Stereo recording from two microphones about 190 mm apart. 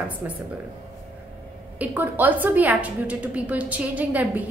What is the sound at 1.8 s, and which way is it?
A woman's voice, 10° right (ahead or behind).